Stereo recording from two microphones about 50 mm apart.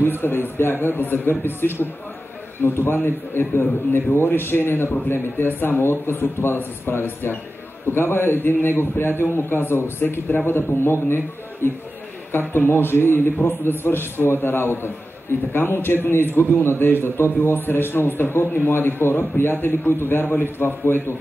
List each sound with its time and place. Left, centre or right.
0.2 s a man's voice: left